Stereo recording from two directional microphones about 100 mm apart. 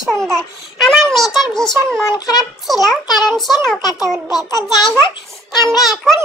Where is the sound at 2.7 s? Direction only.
Centre (ahead or behind).